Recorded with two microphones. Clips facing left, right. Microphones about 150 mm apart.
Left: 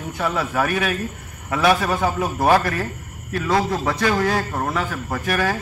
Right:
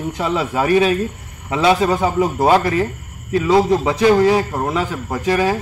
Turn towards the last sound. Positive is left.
turn(degrees=-20)  # may be behind; listen again after turning